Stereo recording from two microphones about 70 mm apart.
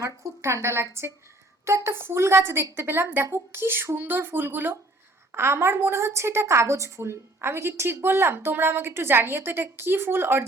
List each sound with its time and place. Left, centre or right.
0.0 s a woman's voice: right